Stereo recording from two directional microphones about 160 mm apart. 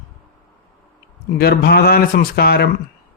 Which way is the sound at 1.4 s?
85° left.